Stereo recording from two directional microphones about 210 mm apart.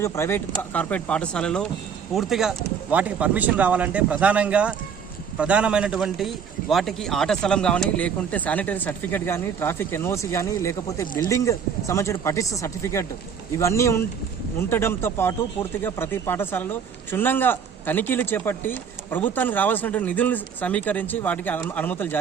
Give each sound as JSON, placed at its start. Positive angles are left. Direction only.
{"t": 0.0, "sound": "a man's voice", "side_deg": 10}
{"t": 11.0, "sound": "speech", "side_deg": 40}
{"t": 11.3, "sound": "a man's voice", "side_deg": 15}